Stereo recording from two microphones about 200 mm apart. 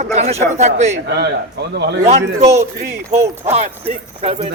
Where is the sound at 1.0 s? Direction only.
55° right (ahead or behind).